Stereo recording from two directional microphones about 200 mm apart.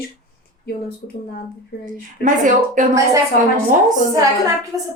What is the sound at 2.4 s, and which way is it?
Speech, 40° right (ahead or behind).